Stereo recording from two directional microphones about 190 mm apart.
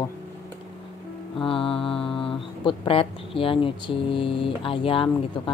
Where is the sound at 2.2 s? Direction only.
30° left (ahead or behind).